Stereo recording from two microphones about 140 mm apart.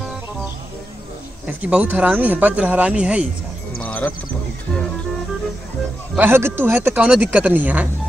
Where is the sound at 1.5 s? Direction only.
10° right (ahead or behind).